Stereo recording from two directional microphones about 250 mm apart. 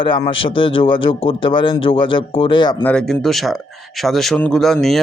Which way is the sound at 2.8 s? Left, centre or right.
Centre.